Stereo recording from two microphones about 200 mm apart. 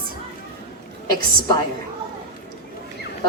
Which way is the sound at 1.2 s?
45° right (ahead or behind).